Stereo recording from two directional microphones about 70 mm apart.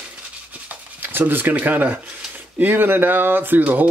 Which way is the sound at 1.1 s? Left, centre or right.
Right.